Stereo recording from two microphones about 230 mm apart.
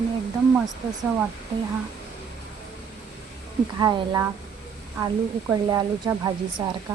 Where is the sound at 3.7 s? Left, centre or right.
Centre.